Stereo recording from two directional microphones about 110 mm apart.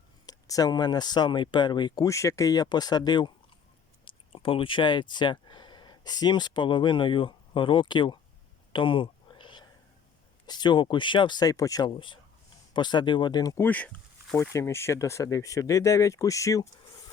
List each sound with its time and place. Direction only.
0.3 s speech: 35° left (ahead or behind)
2.0 s speech: 30° left (ahead or behind)
4.0 s speech: 50° left (ahead or behind)
8.7 s a sound: 50° left (ahead or behind)
10.4 s speech: 40° left (ahead or behind)
11.9 s speech: 50° left (ahead or behind)
13.6 s speech: 15° left (ahead or behind); by 16.6 s 30° left (ahead or behind)